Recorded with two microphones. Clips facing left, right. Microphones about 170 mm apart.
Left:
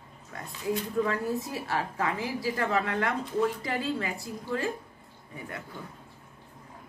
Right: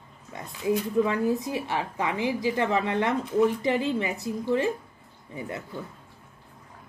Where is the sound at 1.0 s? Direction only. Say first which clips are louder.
Right 4 dB; 10° right (ahead or behind).